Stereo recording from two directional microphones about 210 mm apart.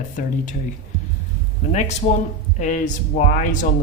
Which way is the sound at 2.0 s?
35° left (ahead or behind).